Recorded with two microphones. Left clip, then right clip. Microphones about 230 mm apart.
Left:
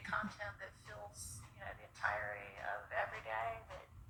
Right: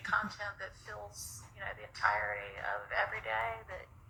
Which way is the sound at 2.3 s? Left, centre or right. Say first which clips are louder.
Right 6 dB; right.